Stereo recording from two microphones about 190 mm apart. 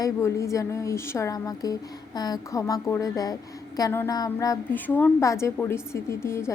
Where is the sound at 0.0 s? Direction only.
15° left (ahead or behind).